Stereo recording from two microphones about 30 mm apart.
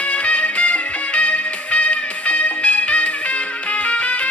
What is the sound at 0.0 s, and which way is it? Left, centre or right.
Music, left.